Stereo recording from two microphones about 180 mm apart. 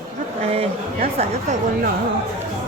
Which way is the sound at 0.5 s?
35° right (ahead or behind).